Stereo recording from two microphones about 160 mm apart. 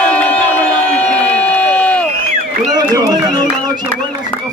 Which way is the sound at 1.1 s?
10° left (ahead or behind).